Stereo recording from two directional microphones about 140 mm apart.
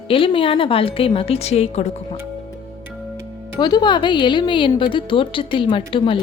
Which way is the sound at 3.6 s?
30° left (ahead or behind).